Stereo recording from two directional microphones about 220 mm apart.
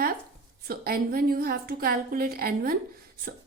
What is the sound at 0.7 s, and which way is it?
A woman's voice, 40° right (ahead or behind).